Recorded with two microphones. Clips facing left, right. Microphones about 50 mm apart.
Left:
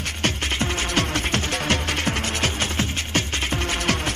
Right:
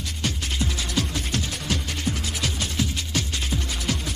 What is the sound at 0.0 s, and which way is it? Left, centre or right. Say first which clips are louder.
Music: left 5 dB; left.